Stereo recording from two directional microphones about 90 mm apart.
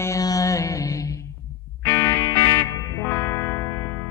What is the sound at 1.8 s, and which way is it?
Music, 35° left (ahead or behind).